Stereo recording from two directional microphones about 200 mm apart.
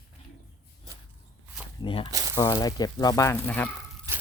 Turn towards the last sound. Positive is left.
turn(degrees=-15)  # may be behind; listen again after turning